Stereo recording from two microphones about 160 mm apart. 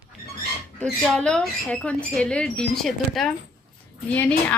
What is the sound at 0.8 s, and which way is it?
A woman's voice, 5° left (ahead or behind).